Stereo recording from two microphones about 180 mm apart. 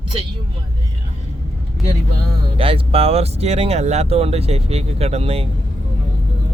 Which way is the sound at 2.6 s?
30° right (ahead or behind).